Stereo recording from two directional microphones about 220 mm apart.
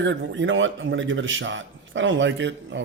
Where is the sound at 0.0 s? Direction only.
60° right (ahead or behind).